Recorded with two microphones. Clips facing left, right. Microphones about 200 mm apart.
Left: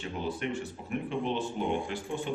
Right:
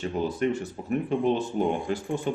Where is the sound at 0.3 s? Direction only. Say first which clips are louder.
Right 6 dB; 40° right (ahead or behind).